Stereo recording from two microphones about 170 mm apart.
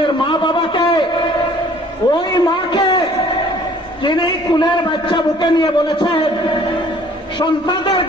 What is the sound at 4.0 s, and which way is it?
A man's voice, 30° left (ahead or behind).